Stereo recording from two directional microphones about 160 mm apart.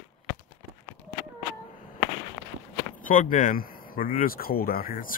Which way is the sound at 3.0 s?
55° left (ahead or behind).